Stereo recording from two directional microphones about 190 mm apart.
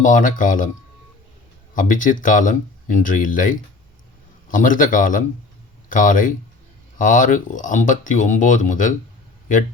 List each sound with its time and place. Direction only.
0.0 s speech: 45° left (ahead or behind)
1.7 s speech: 45° left (ahead or behind)